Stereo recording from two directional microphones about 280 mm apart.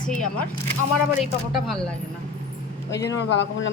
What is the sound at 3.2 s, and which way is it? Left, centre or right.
Speech, left.